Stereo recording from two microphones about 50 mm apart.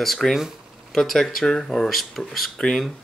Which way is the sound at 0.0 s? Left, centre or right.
Centre.